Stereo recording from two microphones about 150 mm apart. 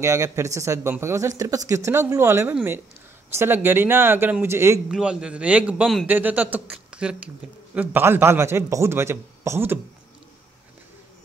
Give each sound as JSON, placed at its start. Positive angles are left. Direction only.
{"t": 0.0, "sound": "a man's voice", "side_deg": -20}
{"t": 4.8, "sound": "a man's voice", "side_deg": -5}